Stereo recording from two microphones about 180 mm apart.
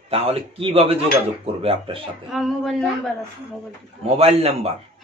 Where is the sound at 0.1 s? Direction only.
35° right (ahead or behind).